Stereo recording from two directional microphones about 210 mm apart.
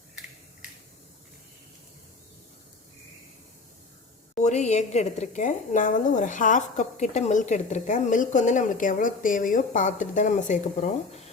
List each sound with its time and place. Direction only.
4.4 s a woman's voice: 35° left (ahead or behind)